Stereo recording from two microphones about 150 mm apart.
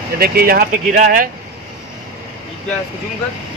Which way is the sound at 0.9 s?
60° right (ahead or behind).